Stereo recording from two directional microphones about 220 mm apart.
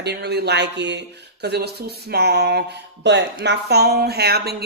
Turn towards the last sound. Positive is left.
turn(degrees=-45)  # may be behind; listen again after turning